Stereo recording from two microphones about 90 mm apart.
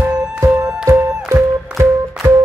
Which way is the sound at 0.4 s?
25° right (ahead or behind).